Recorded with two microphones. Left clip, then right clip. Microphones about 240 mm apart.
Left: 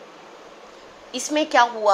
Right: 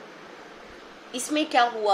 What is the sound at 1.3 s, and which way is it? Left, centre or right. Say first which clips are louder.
Speech: left 4 dB; centre.